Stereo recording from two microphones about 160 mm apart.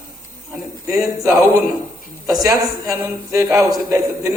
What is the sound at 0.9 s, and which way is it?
Speech, 20° right (ahead or behind).